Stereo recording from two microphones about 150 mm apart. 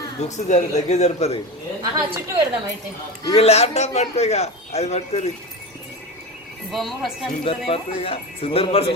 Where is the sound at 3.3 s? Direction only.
45° left (ahead or behind).